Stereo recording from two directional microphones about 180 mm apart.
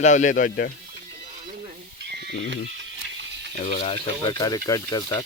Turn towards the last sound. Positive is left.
turn(degrees=20)  # may be behind; listen again after turning